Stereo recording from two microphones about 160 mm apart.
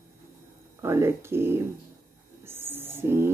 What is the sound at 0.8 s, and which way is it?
Speech, 15° right (ahead or behind).